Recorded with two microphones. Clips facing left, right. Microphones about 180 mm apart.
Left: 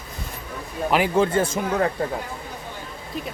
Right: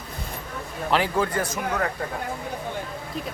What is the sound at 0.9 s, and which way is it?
A man's voice, 20° left (ahead or behind).